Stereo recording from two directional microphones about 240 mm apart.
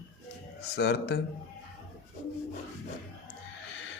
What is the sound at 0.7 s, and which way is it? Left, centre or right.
Speech, left.